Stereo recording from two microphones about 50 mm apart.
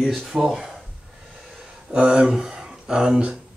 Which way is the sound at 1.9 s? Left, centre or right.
Right.